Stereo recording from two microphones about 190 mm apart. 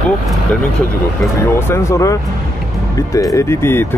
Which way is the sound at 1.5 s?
15° left (ahead or behind).